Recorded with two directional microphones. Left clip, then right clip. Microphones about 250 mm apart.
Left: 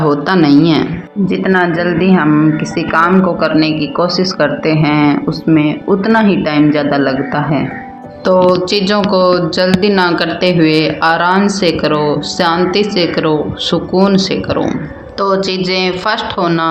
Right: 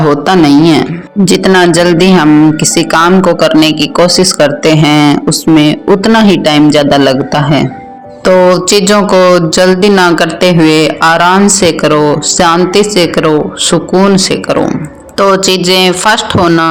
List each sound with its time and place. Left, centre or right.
0.0 s a man's voice: right